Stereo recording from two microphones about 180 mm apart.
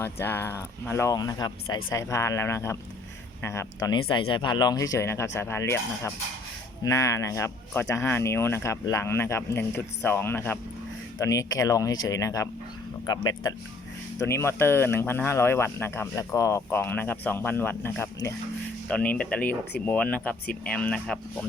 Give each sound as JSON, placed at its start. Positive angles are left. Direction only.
{"t": 0.0, "sound": "speech", "side_deg": 10}
{"t": 14.2, "sound": "speech", "side_deg": 15}